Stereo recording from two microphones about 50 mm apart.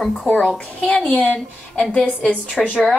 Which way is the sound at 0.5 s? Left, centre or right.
Left.